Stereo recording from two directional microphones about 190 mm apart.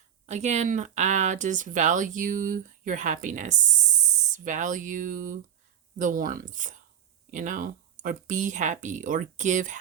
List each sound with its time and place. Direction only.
0.3 s speech: 35° right (ahead or behind)